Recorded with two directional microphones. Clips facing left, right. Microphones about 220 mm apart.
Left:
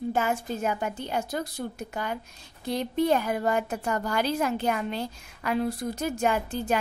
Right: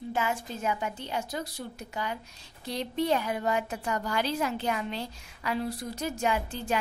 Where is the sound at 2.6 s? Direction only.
50° left (ahead or behind).